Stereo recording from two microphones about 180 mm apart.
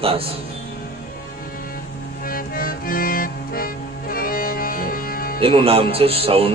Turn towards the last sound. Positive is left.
turn(degrees=-30)  # may be behind; listen again after turning